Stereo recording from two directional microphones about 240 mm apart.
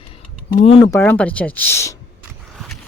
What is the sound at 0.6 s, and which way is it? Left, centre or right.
Speech, left.